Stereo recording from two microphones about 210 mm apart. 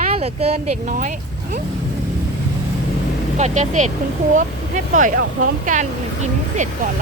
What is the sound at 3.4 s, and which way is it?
Speech, 35° right (ahead or behind).